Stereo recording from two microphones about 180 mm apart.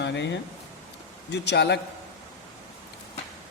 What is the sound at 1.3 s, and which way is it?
Speech, 70° left (ahead or behind).